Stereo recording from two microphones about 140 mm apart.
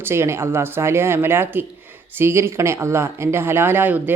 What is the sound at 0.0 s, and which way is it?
Speech, 20° right (ahead or behind).